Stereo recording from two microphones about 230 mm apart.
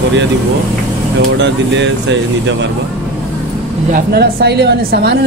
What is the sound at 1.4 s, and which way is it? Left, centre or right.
Speech, right.